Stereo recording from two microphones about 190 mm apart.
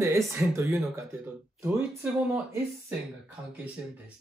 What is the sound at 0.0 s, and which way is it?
Speech, 15° right (ahead or behind).